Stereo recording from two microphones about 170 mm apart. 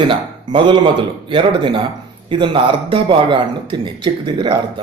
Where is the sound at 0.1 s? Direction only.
30° right (ahead or behind).